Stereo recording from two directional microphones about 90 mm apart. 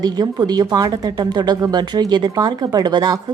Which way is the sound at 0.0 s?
45° right (ahead or behind).